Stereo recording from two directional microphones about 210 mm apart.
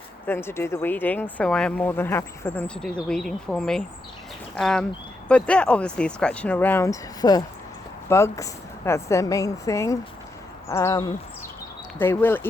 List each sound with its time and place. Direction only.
0.3 s speech: 10° left (ahead or behind)